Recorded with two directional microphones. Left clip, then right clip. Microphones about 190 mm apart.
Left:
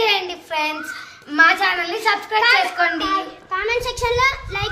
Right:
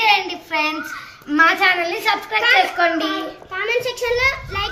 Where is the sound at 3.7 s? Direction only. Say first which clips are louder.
Right 2 dB; 15° left (ahead or behind).